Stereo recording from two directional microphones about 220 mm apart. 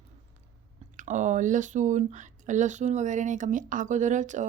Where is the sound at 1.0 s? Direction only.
35° right (ahead or behind).